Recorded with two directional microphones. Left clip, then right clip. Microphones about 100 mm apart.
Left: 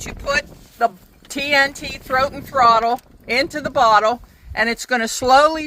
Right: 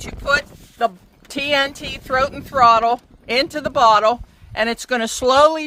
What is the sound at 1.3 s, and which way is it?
Speech, 35° right (ahead or behind).